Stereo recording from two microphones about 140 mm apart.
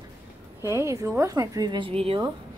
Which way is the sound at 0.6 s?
20° right (ahead or behind).